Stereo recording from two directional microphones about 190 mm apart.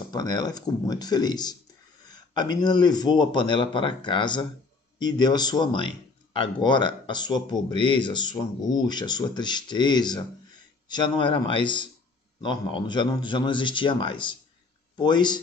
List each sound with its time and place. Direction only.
0.1 s speech: 20° left (ahead or behind)